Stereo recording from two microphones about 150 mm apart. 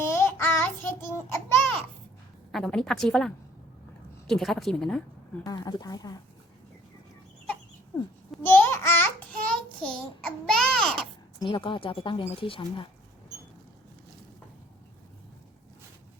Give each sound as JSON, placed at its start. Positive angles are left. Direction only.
{"t": 0.0, "sound": "child singing", "side_deg": 15}
{"t": 2.5, "sound": "a woman's voice", "side_deg": 5}
{"t": 5.5, "sound": "speech", "side_deg": 25}
{"t": 8.4, "sound": "babbling", "side_deg": 15}
{"t": 9.8, "sound": "a child's voice", "side_deg": 5}
{"t": 11.4, "sound": "speech", "side_deg": 35}